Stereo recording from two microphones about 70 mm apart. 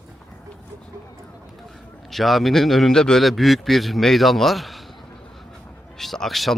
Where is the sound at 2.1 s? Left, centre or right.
Centre.